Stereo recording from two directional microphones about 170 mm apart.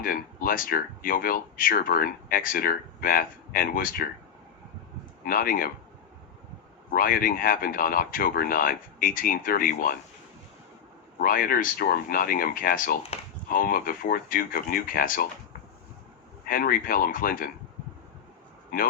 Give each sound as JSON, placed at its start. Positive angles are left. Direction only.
{"t": 0.0, "sound": "speech", "side_deg": 55}
{"t": 5.2, "sound": "speech", "side_deg": 55}
{"t": 6.9, "sound": "speech", "side_deg": 55}
{"t": 11.2, "sound": "speech", "side_deg": 55}
{"t": 16.5, "sound": "speech", "side_deg": 55}